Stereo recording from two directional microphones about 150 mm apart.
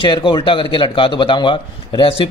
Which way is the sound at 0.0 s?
35° left (ahead or behind).